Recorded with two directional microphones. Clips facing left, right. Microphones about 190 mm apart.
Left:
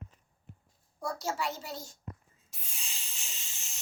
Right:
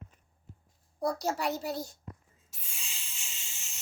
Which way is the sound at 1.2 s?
40° right (ahead or behind).